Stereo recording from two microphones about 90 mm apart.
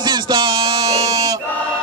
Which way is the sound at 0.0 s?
55° right (ahead or behind).